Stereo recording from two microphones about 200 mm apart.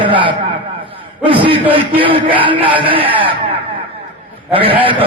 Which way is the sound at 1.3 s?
25° right (ahead or behind).